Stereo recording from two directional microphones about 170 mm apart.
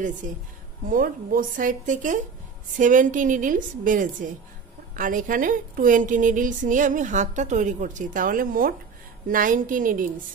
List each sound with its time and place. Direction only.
0.2 s a woman's voice: 50° right (ahead or behind)